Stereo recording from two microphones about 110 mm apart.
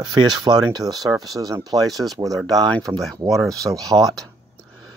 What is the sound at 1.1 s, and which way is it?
Speech, centre (ahead or behind).